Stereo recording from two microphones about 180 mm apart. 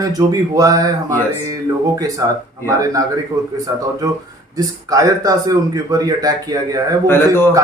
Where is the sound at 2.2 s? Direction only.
15° right (ahead or behind).